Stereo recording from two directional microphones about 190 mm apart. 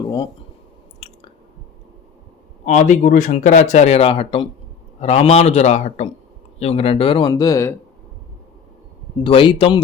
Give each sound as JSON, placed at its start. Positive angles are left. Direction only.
{"t": 2.6, "sound": "speech", "side_deg": 40}
{"t": 9.1, "sound": "speech", "side_deg": 25}